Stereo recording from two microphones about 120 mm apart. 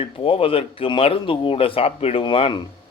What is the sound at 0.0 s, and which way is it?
A man's voice, 50° left (ahead or behind).